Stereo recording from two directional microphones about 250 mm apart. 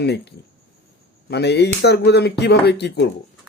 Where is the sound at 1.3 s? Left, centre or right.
Left.